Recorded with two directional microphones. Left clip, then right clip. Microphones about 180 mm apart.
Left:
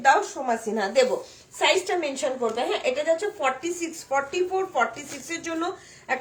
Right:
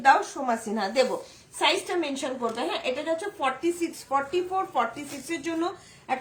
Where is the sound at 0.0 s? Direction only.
10° left (ahead or behind).